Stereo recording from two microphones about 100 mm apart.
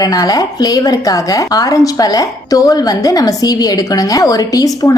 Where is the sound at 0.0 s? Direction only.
40° left (ahead or behind).